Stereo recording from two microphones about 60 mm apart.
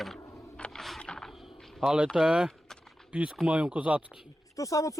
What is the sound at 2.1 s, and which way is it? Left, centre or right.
Speech, centre.